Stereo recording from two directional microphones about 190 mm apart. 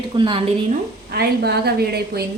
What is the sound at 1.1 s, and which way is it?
A woman's voice, 55° right (ahead or behind).